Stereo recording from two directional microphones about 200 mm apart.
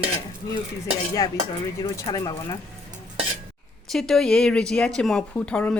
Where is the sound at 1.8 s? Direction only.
20° left (ahead or behind).